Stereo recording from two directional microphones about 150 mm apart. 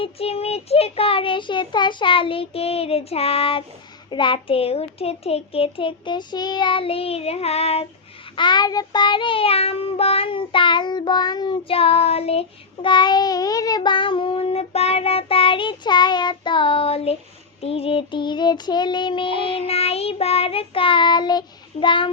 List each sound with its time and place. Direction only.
0.0 s child singing: 40° left (ahead or behind)
8.4 s child singing: 30° left (ahead or behind)